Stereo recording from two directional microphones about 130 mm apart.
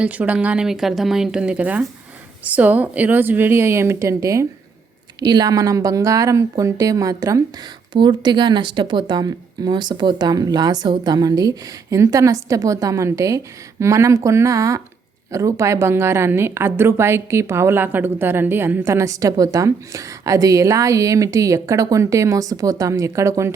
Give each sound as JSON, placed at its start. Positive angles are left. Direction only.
{"t": 0.0, "sound": "a woman's voice", "side_deg": -10}